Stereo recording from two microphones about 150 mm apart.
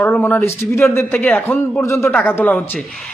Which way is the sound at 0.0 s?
15° left (ahead or behind).